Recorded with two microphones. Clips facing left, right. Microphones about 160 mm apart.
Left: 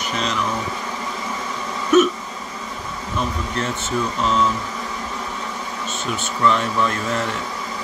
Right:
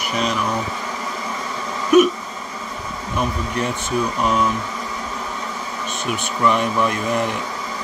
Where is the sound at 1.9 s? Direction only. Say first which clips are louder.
Right 2 dB; 15° right (ahead or behind).